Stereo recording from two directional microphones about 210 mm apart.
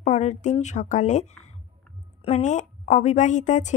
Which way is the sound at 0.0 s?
35° left (ahead or behind).